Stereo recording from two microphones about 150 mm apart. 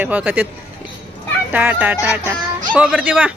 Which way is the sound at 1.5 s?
10° right (ahead or behind).